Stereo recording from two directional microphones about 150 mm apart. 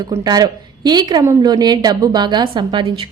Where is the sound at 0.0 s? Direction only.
25° right (ahead or behind).